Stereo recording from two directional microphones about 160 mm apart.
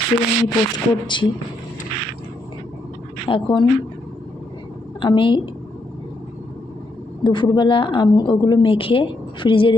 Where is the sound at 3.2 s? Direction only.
30° left (ahead or behind).